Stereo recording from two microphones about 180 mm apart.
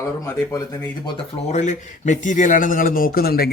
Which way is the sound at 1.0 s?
35° left (ahead or behind).